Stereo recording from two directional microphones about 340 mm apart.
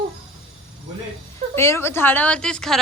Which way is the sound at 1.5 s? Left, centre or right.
Centre.